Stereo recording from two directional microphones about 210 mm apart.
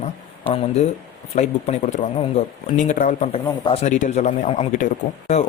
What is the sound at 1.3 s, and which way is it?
Speech, 35° left (ahead or behind).